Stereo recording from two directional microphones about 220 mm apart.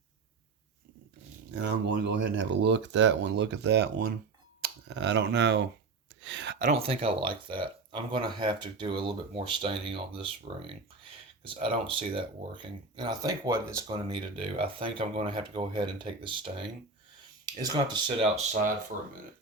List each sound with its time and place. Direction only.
1.6 s speech: 50° right (ahead or behind)
6.6 s speech: 30° right (ahead or behind)